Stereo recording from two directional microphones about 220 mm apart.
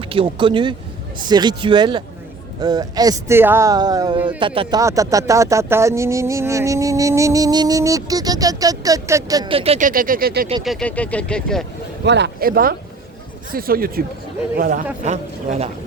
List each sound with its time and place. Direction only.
0.1 s speech: 25° right (ahead or behind); by 10.5 s 45° right (ahead or behind)
10.6 s speech: centre (ahead or behind)
12.0 s a man's voice: 50° right (ahead or behind); by 15.7 s 30° right (ahead or behind)